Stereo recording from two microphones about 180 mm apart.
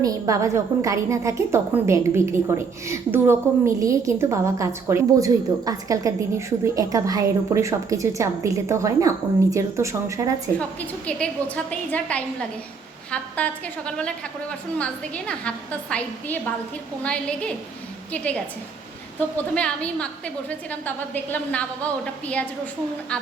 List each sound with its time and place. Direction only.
0.0 s a woman's voice: 15° right (ahead or behind)
10.6 s a woman's voice: 5° left (ahead or behind)
19.5 s a woman's voice: 5° left (ahead or behind)